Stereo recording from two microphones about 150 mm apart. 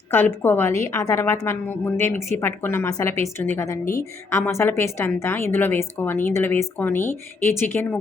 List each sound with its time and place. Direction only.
0.1 s a woman's voice: 15° left (ahead or behind)